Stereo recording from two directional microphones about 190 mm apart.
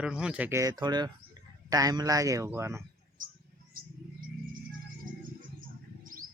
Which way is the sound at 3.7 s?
50° right (ahead or behind).